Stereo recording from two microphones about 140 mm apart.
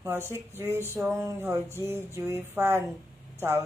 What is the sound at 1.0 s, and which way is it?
Speech, 15° right (ahead or behind).